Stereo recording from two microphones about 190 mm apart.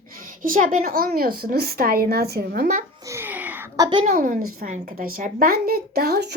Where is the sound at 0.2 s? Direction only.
45° right (ahead or behind).